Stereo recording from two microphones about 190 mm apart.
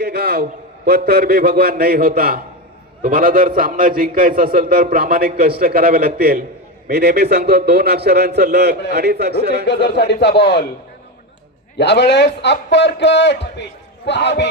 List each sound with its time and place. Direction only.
0.0 s a sound: 55° right (ahead or behind)
0.9 s a man's voice: 55° right (ahead or behind)
9.6 s a man's voice: 65° left (ahead or behind)
11.8 s a man's voice: 65° left (ahead or behind)